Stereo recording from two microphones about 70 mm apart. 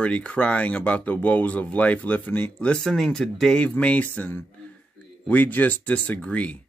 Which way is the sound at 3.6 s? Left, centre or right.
Centre.